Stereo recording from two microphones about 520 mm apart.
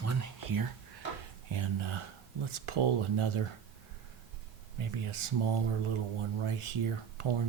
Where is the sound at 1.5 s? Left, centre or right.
Right.